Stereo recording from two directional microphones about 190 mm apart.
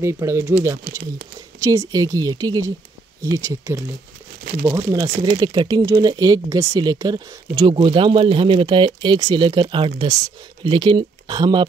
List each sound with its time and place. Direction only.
0.0 s speech: 15° right (ahead or behind)